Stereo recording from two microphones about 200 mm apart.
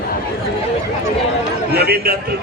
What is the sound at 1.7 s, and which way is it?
Speech, 50° right (ahead or behind).